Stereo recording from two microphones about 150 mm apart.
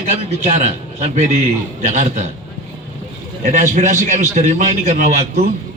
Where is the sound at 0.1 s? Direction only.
50° right (ahead or behind).